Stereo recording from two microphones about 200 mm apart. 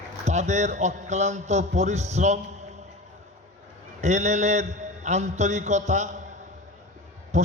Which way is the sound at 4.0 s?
35° right (ahead or behind).